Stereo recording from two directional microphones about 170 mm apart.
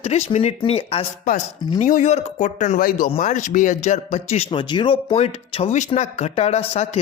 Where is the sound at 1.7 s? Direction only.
45° left (ahead or behind).